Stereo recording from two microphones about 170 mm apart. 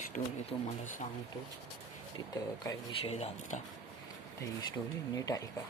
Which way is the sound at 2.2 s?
20° left (ahead or behind).